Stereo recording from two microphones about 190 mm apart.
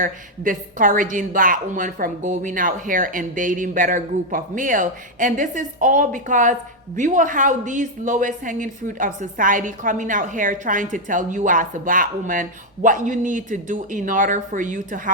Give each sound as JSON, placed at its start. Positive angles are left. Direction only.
{"t": 0.0, "sound": "a woman's voice", "side_deg": -45}